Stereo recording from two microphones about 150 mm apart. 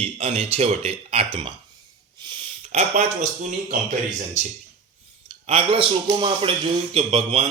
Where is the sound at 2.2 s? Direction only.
30° right (ahead or behind).